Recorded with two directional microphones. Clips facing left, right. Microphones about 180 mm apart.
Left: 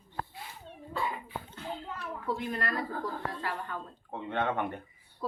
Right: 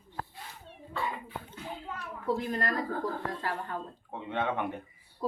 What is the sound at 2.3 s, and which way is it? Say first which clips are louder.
Speech: right 3 dB; 40° right (ahead or behind).